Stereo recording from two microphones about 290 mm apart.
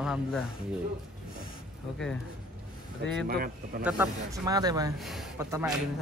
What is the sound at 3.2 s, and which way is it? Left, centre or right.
Speech, right.